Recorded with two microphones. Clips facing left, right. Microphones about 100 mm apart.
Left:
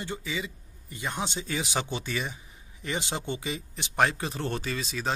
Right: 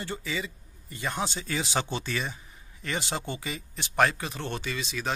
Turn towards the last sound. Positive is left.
turn(degrees=35)  # may be behind; listen again after turning